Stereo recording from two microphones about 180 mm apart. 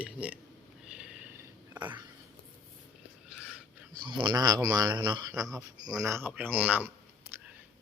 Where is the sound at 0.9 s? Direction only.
5° right (ahead or behind).